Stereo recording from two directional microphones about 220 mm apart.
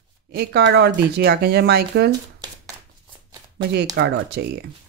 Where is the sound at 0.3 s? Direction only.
50° right (ahead or behind).